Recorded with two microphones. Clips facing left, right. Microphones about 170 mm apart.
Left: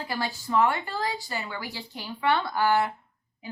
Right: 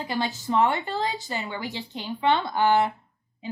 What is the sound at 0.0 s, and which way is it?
A woman's voice, 20° right (ahead or behind).